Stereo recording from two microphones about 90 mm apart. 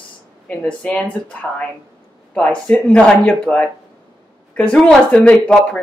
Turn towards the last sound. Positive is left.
turn(degrees=10)  # may be behind; listen again after turning